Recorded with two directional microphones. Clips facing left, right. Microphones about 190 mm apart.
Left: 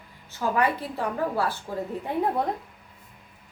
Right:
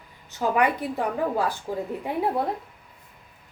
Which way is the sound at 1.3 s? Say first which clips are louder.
Right 1 dB; 15° right (ahead or behind).